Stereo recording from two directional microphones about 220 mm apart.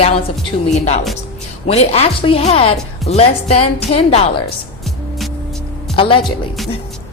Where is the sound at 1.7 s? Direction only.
30° left (ahead or behind).